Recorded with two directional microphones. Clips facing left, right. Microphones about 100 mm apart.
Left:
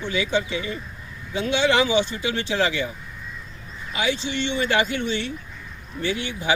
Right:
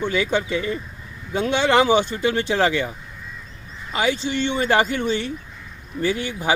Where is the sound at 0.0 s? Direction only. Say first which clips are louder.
Right 2 dB; 50° right (ahead or behind).